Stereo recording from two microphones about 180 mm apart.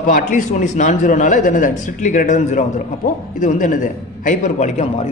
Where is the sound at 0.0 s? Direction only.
50° left (ahead or behind).